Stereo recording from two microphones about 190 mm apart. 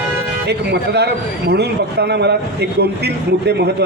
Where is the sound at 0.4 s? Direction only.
60° right (ahead or behind).